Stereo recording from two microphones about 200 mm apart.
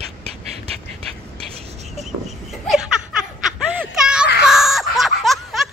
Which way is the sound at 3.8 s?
5° right (ahead or behind).